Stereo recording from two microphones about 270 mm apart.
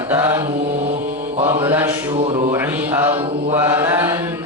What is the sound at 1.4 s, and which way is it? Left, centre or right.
Mantra, centre.